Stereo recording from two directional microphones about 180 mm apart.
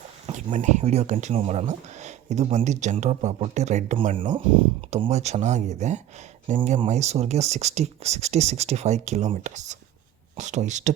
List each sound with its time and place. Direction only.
0.3 s speech: 40° right (ahead or behind)
4.2 s speech: 30° right (ahead or behind)